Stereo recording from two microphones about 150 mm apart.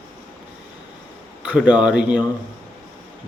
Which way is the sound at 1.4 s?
10° right (ahead or behind).